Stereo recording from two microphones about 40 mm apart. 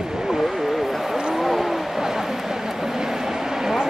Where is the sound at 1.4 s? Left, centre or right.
Centre.